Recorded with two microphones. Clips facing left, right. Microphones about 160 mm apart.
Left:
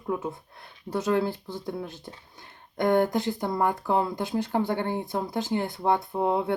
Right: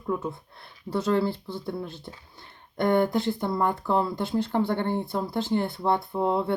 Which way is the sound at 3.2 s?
15° left (ahead or behind).